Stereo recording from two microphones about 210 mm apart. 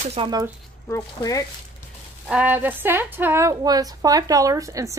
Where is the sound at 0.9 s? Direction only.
15° left (ahead or behind).